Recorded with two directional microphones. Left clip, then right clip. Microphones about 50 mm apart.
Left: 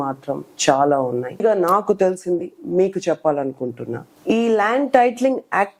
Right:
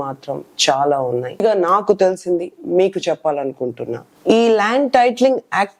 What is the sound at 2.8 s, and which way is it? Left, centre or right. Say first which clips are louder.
Speech: right 2 dB; left.